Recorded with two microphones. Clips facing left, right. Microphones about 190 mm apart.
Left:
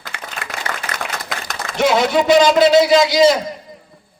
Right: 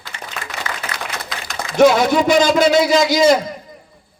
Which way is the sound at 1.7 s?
45° right (ahead or behind).